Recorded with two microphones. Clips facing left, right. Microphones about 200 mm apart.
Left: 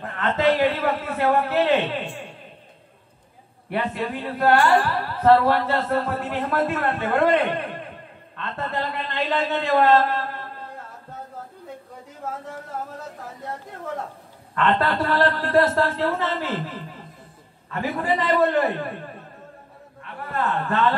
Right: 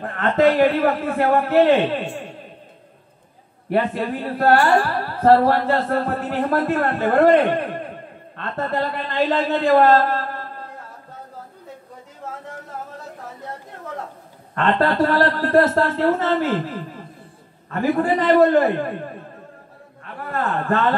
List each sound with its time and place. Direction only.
0.0 s a man's voice: 45° right (ahead or behind)
3.7 s a man's voice: 40° right (ahead or behind)
14.5 s a man's voice: 45° right (ahead or behind)
17.6 s a man's voice: 45° right (ahead or behind)
20.3 s a man's voice: 45° right (ahead or behind)